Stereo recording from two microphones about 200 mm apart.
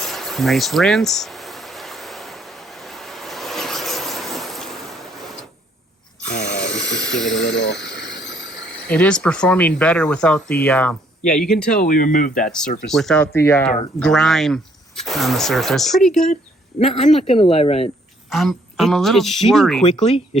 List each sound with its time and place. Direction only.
0.0 s a sound: centre (ahead or behind)
6.3 s a sound: 55° left (ahead or behind)
6.7 s hiss: 5° left (ahead or behind)
7.4 s speech: 60° left (ahead or behind)
8.5 s speech: 5° left (ahead or behind)
11.7 s speech: 45° left (ahead or behind)
12.5 s speech: 5° left (ahead or behind)
14.0 s speech: centre (ahead or behind)
17.2 s speech: 25° left (ahead or behind)
18.3 s a woman's voice: centre (ahead or behind)
20.0 s speech: 30° left (ahead or behind)